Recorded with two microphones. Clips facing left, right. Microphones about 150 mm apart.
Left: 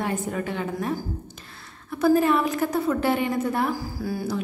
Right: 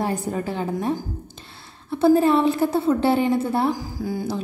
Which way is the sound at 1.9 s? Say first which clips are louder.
Right 3 dB; 30° right (ahead or behind).